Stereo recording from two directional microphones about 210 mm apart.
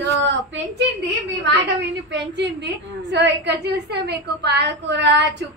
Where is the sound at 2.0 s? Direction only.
55° right (ahead or behind).